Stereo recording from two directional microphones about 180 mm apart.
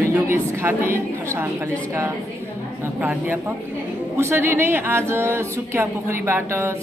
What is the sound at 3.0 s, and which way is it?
Speech, 10° right (ahead or behind).